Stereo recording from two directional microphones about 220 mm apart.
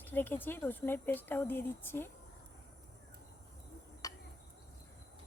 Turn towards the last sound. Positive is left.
turn(degrees=15)  # may be behind; listen again after turning